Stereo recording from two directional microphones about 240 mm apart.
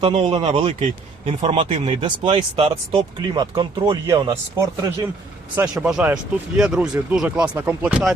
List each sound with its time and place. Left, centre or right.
0.0 s speech: right
5.5 s speech: centre